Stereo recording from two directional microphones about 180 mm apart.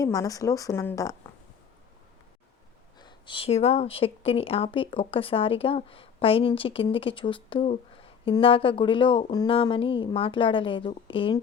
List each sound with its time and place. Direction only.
0.0 s speech: 20° left (ahead or behind)
3.0 s speech: 25° left (ahead or behind)